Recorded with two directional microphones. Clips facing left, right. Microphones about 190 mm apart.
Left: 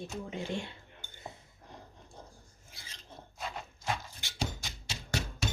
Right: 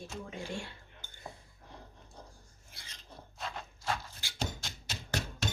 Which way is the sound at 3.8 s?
15° left (ahead or behind).